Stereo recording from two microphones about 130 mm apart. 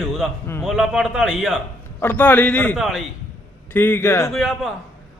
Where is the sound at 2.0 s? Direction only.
15° left (ahead or behind).